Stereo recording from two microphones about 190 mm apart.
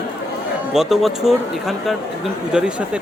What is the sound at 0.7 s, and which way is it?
A man's voice, centre (ahead or behind).